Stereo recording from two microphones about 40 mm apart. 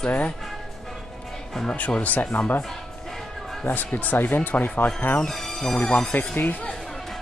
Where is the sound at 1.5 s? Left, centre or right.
Centre.